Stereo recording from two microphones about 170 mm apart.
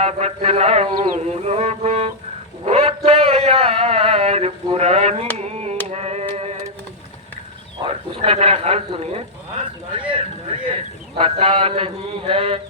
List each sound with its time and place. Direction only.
0.0 s a man's voice: 40° right (ahead or behind)
1.1 s a sound: 40° right (ahead or behind)
7.9 s a man's voice: 35° right (ahead or behind)